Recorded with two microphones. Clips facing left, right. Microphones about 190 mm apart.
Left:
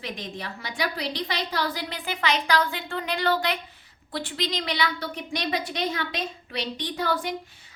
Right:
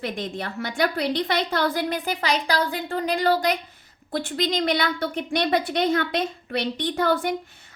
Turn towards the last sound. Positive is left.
turn(degrees=-55)  # may be behind; listen again after turning